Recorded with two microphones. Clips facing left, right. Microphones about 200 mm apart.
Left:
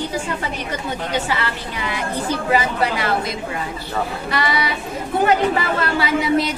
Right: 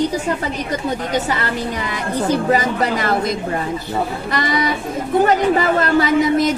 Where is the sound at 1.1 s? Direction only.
40° right (ahead or behind).